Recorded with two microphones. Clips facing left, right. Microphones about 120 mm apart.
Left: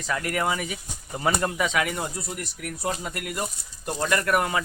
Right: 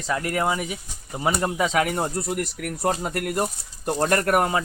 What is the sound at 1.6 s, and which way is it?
Speech, 35° right (ahead or behind).